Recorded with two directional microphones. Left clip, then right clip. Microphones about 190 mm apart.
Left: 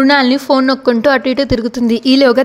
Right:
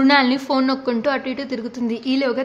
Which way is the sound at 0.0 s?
35° left (ahead or behind).